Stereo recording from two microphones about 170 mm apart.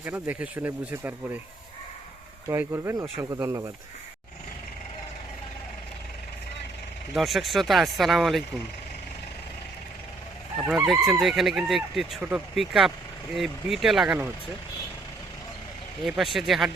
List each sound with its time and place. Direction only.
0.0 s speech: 10° right (ahead or behind)
2.5 s speech: 15° right (ahead or behind)
7.1 s speech: centre (ahead or behind)
10.6 s speech: 5° right (ahead or behind)
16.0 s speech: centre (ahead or behind)